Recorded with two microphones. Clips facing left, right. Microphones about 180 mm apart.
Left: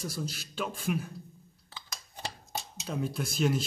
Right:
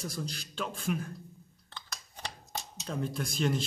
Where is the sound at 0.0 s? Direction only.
5° left (ahead or behind).